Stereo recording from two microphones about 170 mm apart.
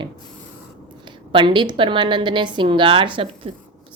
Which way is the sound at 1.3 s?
25° right (ahead or behind).